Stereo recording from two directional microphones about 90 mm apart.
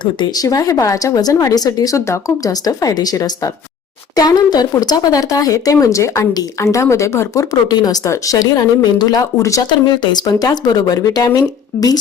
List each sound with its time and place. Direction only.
0.0 s speech: 60° left (ahead or behind)
0.4 s speech: 40° left (ahead or behind)
7.5 s speech: 50° left (ahead or behind)
9.6 s speech: 55° left (ahead or behind)